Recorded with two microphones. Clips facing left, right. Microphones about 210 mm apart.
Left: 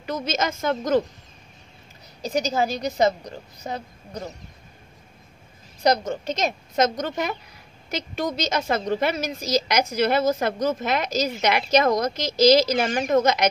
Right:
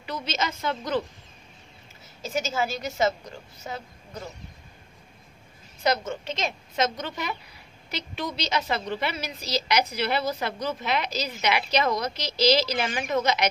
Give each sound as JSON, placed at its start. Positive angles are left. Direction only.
{"t": 0.0, "sound": "a woman's voice", "side_deg": 45}
{"t": 2.2, "sound": "a woman's voice", "side_deg": 40}
{"t": 5.8, "sound": "a woman's voice", "side_deg": 40}